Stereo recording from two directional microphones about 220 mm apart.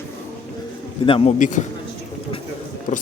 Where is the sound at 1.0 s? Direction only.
25° left (ahead or behind).